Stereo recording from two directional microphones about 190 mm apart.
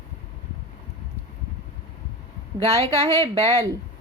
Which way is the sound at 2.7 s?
35° right (ahead or behind).